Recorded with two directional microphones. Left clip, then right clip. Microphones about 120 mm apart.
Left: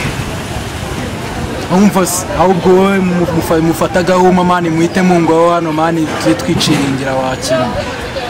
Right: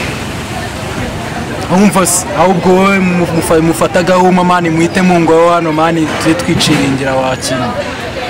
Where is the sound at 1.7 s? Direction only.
5° right (ahead or behind).